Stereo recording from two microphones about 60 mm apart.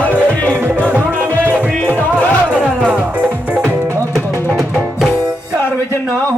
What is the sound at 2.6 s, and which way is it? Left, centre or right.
Music, centre.